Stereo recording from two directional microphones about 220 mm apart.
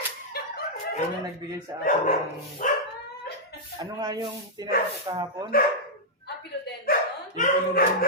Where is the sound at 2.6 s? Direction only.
35° left (ahead or behind).